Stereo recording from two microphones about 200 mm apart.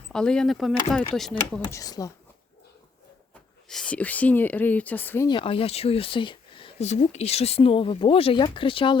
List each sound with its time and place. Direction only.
0.1 s speech: 5° left (ahead or behind)
1.6 s speech: 20° left (ahead or behind)
3.7 s speech: 5° left (ahead or behind)
5.3 s speech: 25° left (ahead or behind)